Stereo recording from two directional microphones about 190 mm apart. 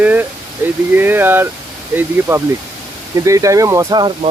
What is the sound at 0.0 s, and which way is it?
Speech, 10° right (ahead or behind).